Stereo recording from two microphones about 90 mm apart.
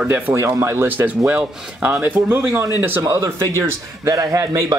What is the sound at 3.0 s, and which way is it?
A man's voice, 35° right (ahead or behind).